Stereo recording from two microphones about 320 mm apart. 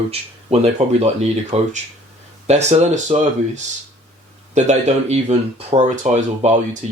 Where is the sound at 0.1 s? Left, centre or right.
Centre.